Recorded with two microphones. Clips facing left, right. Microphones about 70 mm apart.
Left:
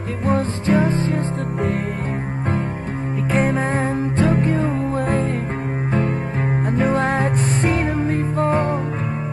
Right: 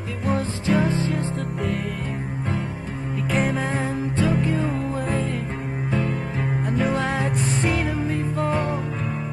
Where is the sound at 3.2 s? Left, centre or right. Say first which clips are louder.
Left 4 dB; left.